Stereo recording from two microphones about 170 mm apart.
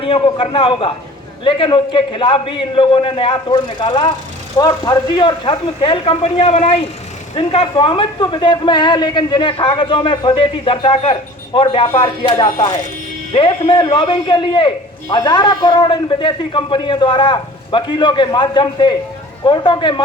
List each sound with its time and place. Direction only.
0.0 s a man's voice: 30° left (ahead or behind)